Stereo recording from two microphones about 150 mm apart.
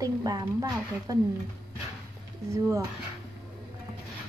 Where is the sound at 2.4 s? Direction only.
20° right (ahead or behind).